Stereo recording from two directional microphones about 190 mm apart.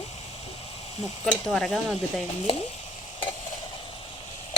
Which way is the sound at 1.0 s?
Centre (ahead or behind).